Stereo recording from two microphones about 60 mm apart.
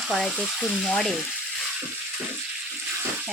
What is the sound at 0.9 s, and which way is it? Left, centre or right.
Frying, centre.